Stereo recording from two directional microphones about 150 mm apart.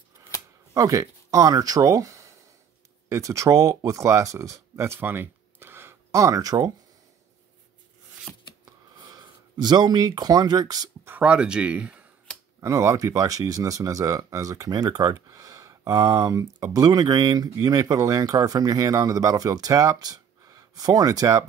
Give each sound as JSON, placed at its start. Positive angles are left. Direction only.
{"t": 0.7, "sound": "speech", "side_deg": -25}
{"t": 8.9, "sound": "speech", "side_deg": -30}
{"t": 11.1, "sound": "speech", "side_deg": -10}
{"t": 12.5, "sound": "speech", "side_deg": -20}